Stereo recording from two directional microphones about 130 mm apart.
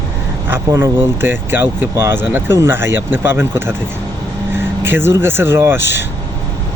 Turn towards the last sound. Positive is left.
turn(degrees=-15)  # may be behind; listen again after turning